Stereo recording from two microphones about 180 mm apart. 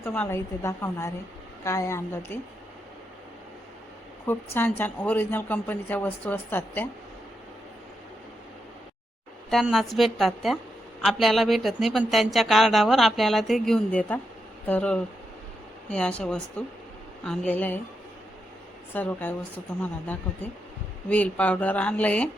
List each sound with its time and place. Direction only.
0.0 s speech: 15° left (ahead or behind)
4.3 s speech: 10° left (ahead or behind)
9.5 s speech: centre (ahead or behind)
18.9 s speech: 10° left (ahead or behind)
21.1 s speech: 10° left (ahead or behind)